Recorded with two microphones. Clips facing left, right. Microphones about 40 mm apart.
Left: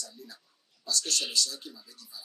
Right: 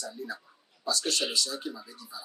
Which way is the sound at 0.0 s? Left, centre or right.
Right.